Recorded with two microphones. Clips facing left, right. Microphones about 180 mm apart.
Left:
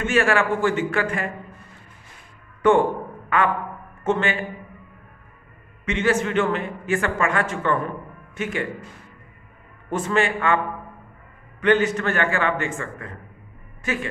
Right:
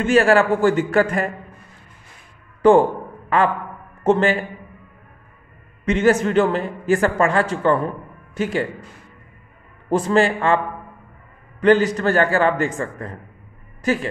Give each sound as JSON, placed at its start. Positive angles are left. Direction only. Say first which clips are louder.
{"t": 0.0, "sound": "a man's voice", "louder": "right 5 dB", "side_deg": -35}
{"t": 2.6, "sound": "a sound", "louder": "right 4 dB", "side_deg": -35}
{"t": 4.0, "sound": "a man's voice", "louder": "right 6 dB", "side_deg": -35}
{"t": 5.9, "sound": "a man's voice", "louder": "right 5 dB", "side_deg": -40}
{"t": 9.8, "sound": "a man's voice", "louder": "right 5 dB", "side_deg": -35}
{"t": 11.6, "sound": "a man's voice", "louder": "right 4 dB", "side_deg": -35}